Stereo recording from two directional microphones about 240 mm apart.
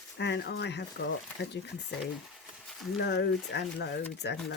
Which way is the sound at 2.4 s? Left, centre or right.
Centre.